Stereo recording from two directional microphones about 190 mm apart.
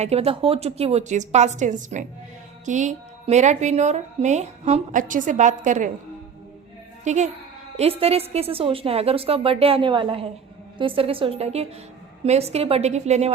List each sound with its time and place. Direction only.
0.0 s speech: 35° right (ahead or behind)
7.0 s a woman's voice: 40° right (ahead or behind)